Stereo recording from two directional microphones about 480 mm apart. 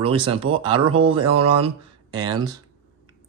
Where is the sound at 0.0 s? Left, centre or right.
Centre.